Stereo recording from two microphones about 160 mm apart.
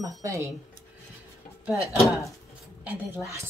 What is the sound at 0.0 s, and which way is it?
Speech, 20° right (ahead or behind).